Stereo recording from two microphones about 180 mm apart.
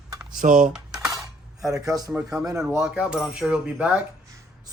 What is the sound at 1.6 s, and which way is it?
Speech, 20° right (ahead or behind).